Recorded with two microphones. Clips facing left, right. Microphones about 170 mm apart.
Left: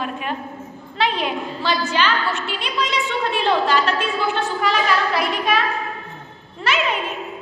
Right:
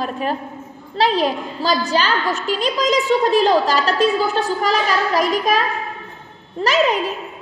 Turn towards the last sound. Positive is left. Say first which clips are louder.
# right 5 dB
turn(degrees=-40)  # may be behind; listen again after turning